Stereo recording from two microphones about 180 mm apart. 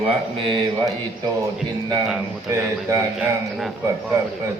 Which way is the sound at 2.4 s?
15° right (ahead or behind).